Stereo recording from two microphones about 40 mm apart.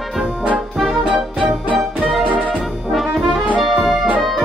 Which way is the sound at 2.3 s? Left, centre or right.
Right.